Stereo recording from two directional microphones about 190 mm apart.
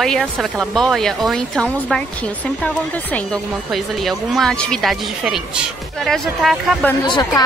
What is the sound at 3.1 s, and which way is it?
Speech, centre (ahead or behind).